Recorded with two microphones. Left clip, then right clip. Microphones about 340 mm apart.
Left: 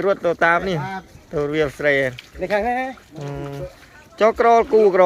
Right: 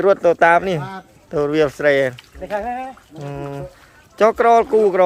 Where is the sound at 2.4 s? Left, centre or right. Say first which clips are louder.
Left 4 dB; left.